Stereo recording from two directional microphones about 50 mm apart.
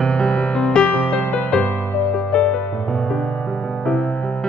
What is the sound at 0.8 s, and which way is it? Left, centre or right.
Music, left.